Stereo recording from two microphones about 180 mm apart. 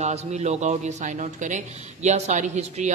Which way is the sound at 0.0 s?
35° right (ahead or behind).